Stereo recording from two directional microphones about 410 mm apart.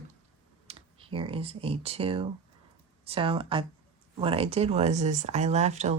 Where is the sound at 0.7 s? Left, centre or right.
Centre.